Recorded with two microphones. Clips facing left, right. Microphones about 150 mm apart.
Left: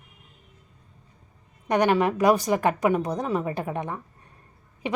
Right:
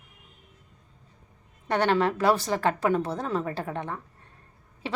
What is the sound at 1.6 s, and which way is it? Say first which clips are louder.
A woman's voice: left 2 dB; 15° left (ahead or behind).